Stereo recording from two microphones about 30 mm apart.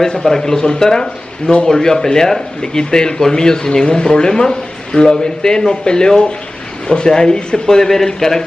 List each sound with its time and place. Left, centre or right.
0.2 s speech: centre